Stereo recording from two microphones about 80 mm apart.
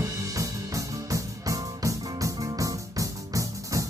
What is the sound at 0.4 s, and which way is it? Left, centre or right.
Music, right.